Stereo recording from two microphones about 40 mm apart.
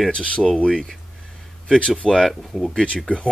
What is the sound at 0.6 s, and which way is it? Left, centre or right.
Speech, centre.